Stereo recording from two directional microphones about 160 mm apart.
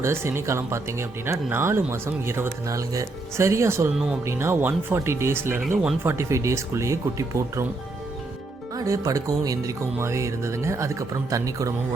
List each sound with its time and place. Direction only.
0.0 s speech: 15° right (ahead or behind)
8.7 s speech: 20° right (ahead or behind)